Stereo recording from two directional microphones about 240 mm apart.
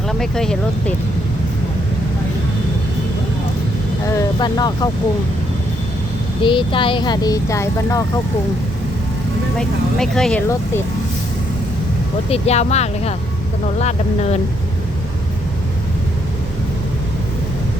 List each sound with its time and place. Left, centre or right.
0.1 s speech: centre
4.1 s speech: centre
6.4 s speech: centre
9.6 s speech: centre
12.3 s speech: left